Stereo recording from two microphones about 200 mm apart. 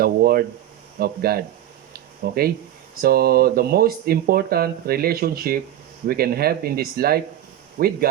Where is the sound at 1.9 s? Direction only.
50° right (ahead or behind).